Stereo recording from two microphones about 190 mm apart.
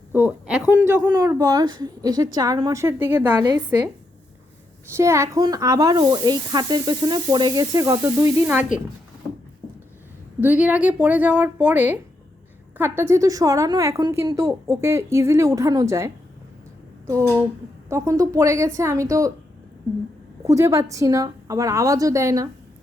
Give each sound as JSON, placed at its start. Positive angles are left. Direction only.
{"t": 0.1, "sound": "a sound", "side_deg": -10}
{"t": 0.9, "sound": "speech", "side_deg": -15}
{"t": 4.9, "sound": "speech", "side_deg": -15}
{"t": 10.4, "sound": "a woman's voice", "side_deg": -10}
{"t": 17.8, "sound": "a woman's voice", "side_deg": -15}
{"t": 20.5, "sound": "a woman's voice", "side_deg": -15}